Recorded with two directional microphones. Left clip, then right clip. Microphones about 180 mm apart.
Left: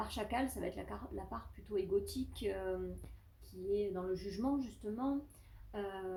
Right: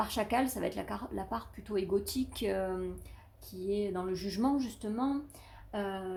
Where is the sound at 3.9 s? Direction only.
45° right (ahead or behind).